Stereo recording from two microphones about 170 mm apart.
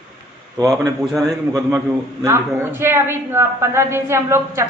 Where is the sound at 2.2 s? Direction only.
15° right (ahead or behind).